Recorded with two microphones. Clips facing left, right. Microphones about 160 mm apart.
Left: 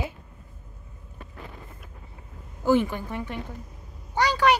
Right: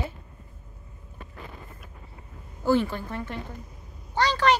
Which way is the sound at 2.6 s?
15° left (ahead or behind).